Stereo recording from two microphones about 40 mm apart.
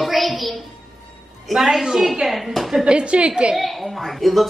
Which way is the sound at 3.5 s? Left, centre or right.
Centre.